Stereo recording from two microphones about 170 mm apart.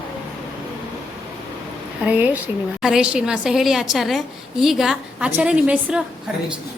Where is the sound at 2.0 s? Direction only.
10° right (ahead or behind).